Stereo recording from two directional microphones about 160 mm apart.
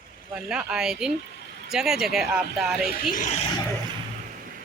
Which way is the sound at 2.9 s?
55° left (ahead or behind).